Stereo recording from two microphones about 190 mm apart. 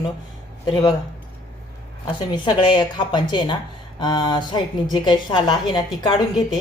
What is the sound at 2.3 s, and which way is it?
A woman's voice, 25° left (ahead or behind).